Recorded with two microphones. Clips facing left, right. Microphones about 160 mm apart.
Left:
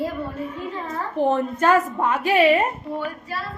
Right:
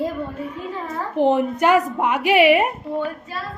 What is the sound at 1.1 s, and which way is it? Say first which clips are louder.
A woman's voice: right 3 dB; 15° right (ahead or behind).